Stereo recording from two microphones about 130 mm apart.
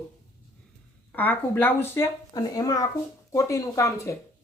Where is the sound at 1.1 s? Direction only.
15° left (ahead or behind).